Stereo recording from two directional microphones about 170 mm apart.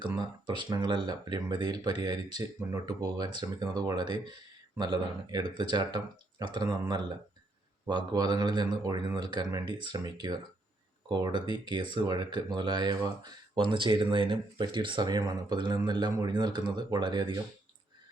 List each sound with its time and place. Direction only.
0.2 s speech: 25° right (ahead or behind)